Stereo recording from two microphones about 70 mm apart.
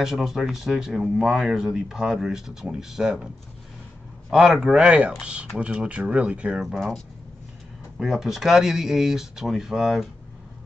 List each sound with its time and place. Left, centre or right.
0.0 s speech: centre
1.0 s speech: centre
1.3 s speech: centre
4.3 s a man's voice: centre
8.0 s speech: centre